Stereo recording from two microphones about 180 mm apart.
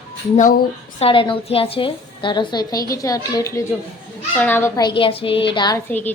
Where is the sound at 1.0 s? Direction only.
30° left (ahead or behind); by 4.7 s 10° left (ahead or behind).